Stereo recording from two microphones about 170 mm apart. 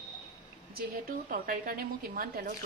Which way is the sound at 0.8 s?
60° right (ahead or behind).